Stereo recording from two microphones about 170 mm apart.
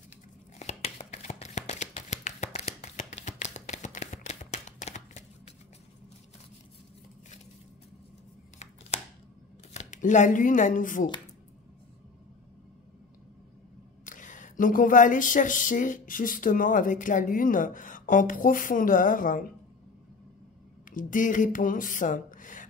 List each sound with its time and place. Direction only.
0.6 s shuffling cards: 40° left (ahead or behind)
9.8 s speech: 45° left (ahead or behind)
14.0 s speech: 50° left (ahead or behind)
20.9 s speech: 50° left (ahead or behind)